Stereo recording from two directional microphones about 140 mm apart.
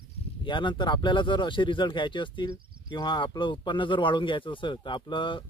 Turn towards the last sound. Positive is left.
turn(degrees=35)  # may be behind; listen again after turning